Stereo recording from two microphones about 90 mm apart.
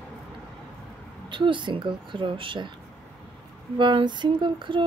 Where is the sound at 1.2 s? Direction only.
65° right (ahead or behind).